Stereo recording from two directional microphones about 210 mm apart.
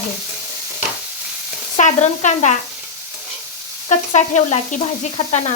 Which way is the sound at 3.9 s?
35° left (ahead or behind).